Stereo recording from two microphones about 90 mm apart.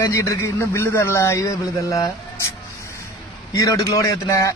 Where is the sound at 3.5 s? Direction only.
40° left (ahead or behind).